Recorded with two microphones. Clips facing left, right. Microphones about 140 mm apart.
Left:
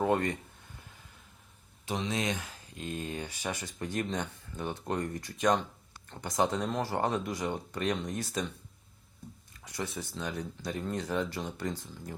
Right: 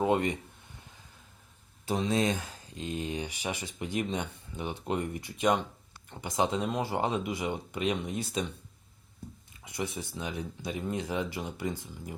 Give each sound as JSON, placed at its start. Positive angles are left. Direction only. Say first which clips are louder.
{"t": 0.0, "sound": "speech", "louder": "right 1 dB", "side_deg": -15}
{"t": 1.9, "sound": "speech", "louder": "right 4 dB", "side_deg": -35}